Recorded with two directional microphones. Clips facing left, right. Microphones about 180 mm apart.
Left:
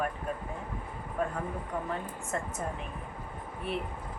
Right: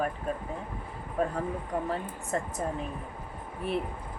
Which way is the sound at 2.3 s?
35° right (ahead or behind).